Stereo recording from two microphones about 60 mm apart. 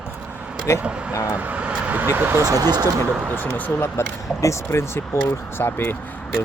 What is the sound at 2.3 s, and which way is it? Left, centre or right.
Speech, right.